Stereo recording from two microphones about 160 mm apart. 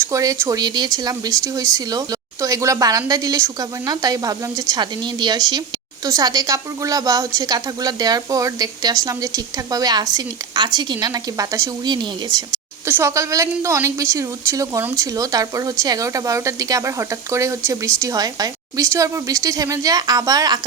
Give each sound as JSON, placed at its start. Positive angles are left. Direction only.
{"t": 0.0, "sound": "a woman's voice", "side_deg": -20}